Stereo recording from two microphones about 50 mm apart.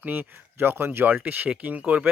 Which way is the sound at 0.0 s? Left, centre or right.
Right.